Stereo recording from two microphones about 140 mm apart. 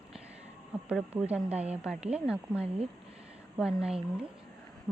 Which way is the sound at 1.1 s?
10° right (ahead or behind).